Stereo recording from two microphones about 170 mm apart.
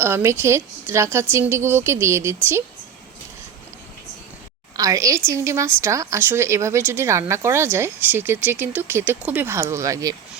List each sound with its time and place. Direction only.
0.0 s a woman's voice: 15° right (ahead or behind)
4.8 s a woman's voice: 20° right (ahead or behind)